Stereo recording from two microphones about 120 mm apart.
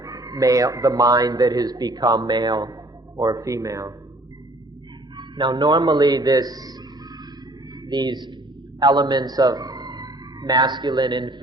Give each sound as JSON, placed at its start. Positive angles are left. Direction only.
{"t": 0.0, "sound": "a man's voice", "side_deg": -30}
{"t": 5.1, "sound": "a man's voice", "side_deg": -40}
{"t": 7.9, "sound": "a man's voice", "side_deg": -35}